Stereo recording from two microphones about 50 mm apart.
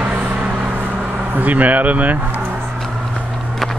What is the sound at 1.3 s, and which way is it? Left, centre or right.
Speech, right.